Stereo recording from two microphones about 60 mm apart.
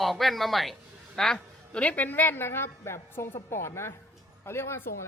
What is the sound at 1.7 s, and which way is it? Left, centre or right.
A woman's voice, left.